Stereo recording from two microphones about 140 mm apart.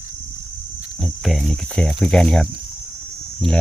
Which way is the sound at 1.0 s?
Centre (ahead or behind).